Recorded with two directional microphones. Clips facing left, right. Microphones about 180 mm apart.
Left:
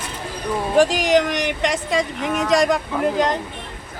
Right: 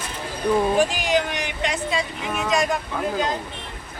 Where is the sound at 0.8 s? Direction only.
90° left; by 3.3 s 75° left (ahead or behind).